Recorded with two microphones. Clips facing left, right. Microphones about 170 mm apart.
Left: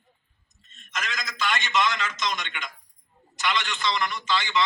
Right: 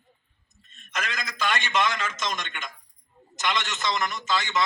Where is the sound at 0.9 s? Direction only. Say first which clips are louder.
Right 1 dB; 55° right (ahead or behind).